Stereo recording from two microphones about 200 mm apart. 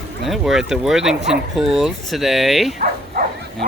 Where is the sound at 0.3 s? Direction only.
Centre (ahead or behind).